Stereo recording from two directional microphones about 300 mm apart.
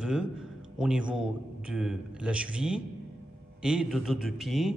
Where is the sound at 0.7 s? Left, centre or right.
Centre.